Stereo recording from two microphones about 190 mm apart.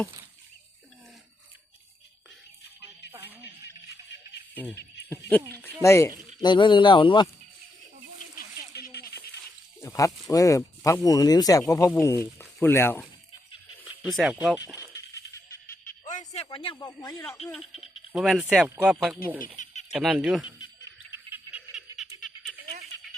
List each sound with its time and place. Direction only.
3.1 s music: 10° right (ahead or behind)
5.8 s speech: 15° left (ahead or behind)
8.7 s music: 55° left (ahead or behind)
9.8 s speech: 15° left (ahead or behind)
14.0 s speech: centre (ahead or behind)
16.0 s a sound: 40° left (ahead or behind)
16.7 s speech: 20° left (ahead or behind)
17.7 s speech: 5° right (ahead or behind)
19.6 s speech: 40° left (ahead or behind)
19.9 s speech: centre (ahead or behind)
21.1 s music: 10° right (ahead or behind)